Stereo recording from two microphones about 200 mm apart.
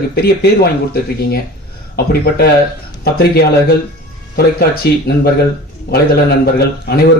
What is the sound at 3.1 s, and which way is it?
Speech, 50° left (ahead or behind).